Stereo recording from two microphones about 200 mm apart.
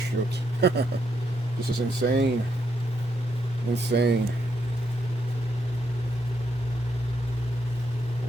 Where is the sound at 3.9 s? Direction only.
55° right (ahead or behind).